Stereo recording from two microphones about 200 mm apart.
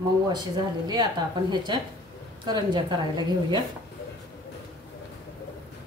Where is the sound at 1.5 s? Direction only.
20° right (ahead or behind).